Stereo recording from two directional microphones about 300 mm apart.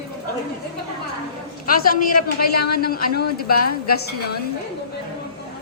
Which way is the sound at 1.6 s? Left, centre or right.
Left.